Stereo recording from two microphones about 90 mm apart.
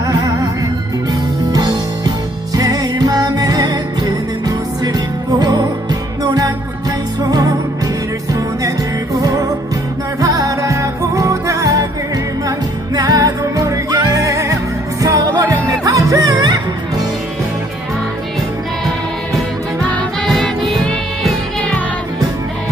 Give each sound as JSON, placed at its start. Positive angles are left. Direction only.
{"t": 0.1, "sound": "music", "side_deg": -40}
{"t": 1.5, "sound": "music", "side_deg": -50}
{"t": 9.2, "sound": "music", "side_deg": -40}
{"t": 20.2, "sound": "music", "side_deg": 5}